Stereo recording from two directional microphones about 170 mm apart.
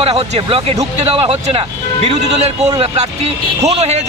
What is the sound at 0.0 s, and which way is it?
Speech, 35° right (ahead or behind).